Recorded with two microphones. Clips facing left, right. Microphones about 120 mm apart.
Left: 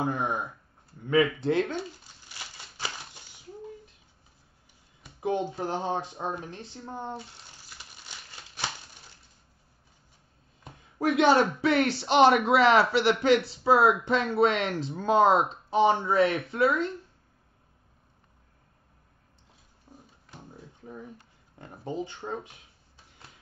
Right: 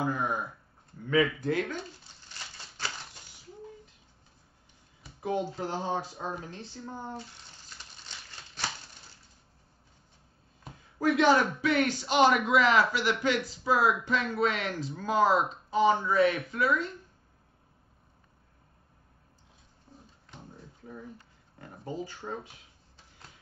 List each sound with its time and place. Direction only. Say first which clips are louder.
0.0 s a sound: left 1 dB; 25° left (ahead or behind)
1.4 s speech: left 4 dB; 25° left (ahead or behind)
1.8 s crumpling: left 5 dB; 10° left (ahead or behind)
5.2 s speech: left 2 dB; 20° left (ahead or behind)
7.6 s crumpling: even; 10° left (ahead or behind)
10.7 s a man's voice: even; 25° left (ahead or behind)
12.9 s speech: left 6 dB; 70° left (ahead or behind)
13.5 s speech: left 5 dB; 30° left (ahead or behind)
19.9 s a sound: left 2 dB; 10° left (ahead or behind)
21.5 s speech: left 3 dB; 25° left (ahead or behind)